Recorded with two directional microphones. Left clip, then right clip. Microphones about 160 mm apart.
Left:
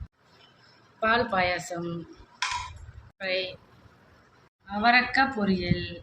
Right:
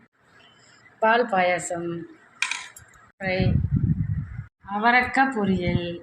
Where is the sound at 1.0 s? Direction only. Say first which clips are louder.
Right 4 dB; 25° right (ahead or behind).